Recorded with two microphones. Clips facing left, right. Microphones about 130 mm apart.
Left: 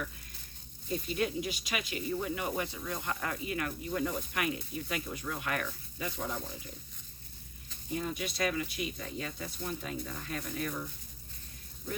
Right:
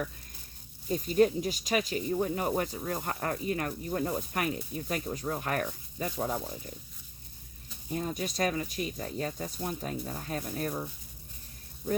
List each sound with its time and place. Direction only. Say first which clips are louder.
0.9 s speech: right 8 dB; 40° right (ahead or behind)
7.9 s speech: right 3 dB; 40° right (ahead or behind)